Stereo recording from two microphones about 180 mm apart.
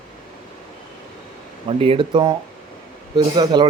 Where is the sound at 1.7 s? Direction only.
30° right (ahead or behind).